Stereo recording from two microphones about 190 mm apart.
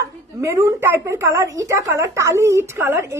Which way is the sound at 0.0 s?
15° right (ahead or behind).